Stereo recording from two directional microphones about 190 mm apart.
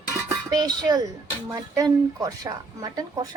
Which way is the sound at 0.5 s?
20° right (ahead or behind).